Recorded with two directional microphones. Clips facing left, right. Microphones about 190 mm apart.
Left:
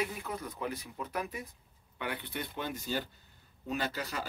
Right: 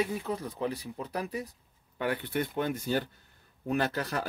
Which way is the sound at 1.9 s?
45° right (ahead or behind).